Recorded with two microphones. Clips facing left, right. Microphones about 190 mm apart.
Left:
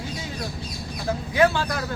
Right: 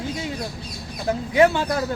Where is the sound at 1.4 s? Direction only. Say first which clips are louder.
Right 3 dB; 25° right (ahead or behind).